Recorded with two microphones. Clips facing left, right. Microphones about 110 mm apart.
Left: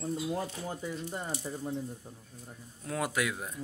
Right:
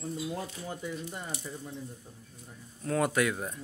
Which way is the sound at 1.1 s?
35° left (ahead or behind).